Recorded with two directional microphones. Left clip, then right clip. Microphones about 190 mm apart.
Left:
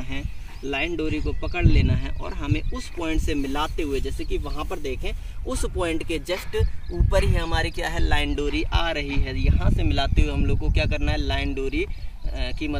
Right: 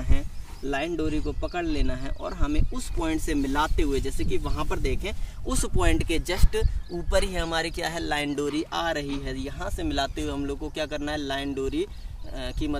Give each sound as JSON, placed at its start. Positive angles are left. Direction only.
{"t": 0.7, "sound": "speech", "side_deg": -20}
{"t": 3.0, "sound": "speech", "side_deg": -40}
{"t": 8.4, "sound": "speech", "side_deg": -25}